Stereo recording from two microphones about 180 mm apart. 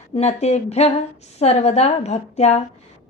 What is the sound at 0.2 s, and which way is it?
A woman's voice, 40° left (ahead or behind).